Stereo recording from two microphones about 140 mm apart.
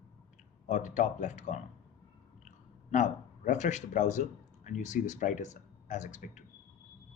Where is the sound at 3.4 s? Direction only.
60° left (ahead or behind).